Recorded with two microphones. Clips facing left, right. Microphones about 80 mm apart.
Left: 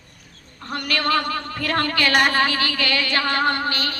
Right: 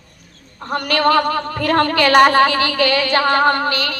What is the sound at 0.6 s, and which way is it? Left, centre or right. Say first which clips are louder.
A woman's voice: right 7 dB; right.